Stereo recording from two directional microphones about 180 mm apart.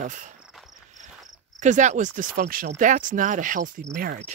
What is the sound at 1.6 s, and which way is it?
Speech, 40° right (ahead or behind).